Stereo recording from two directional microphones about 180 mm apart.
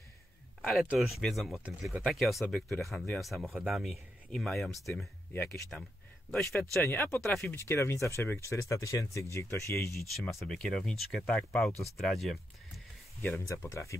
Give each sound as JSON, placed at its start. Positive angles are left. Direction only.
{"t": 0.7, "sound": "speech", "side_deg": 0}
{"t": 10.1, "sound": "speech", "side_deg": 0}
{"t": 13.2, "sound": "speech", "side_deg": 15}